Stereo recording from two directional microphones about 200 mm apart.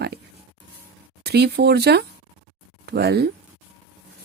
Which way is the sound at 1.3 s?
55° right (ahead or behind).